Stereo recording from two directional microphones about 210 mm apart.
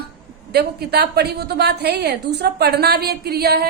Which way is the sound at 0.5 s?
50° right (ahead or behind).